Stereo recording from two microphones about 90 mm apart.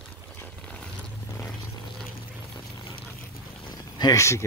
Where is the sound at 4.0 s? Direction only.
45° left (ahead or behind).